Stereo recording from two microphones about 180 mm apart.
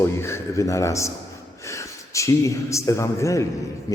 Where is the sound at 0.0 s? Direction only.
15° left (ahead or behind).